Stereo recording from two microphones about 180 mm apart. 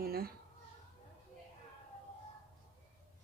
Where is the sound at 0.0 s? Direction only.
55° right (ahead or behind).